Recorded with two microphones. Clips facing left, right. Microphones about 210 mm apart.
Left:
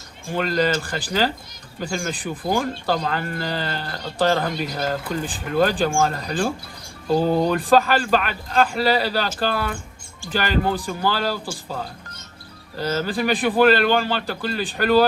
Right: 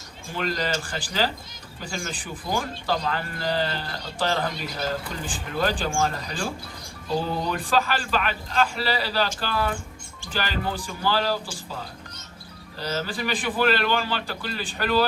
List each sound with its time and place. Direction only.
0.3 s speech: 50° left (ahead or behind)
12.8 s speech: 50° left (ahead or behind)